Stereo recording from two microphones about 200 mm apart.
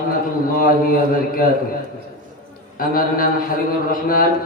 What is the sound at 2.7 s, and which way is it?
A man's voice, 45° left (ahead or behind).